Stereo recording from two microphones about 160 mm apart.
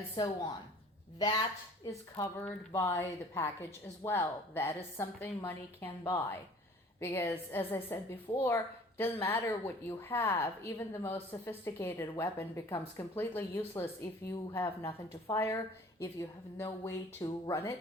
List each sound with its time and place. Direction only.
0.2 s a woman's voice: 25° left (ahead or behind)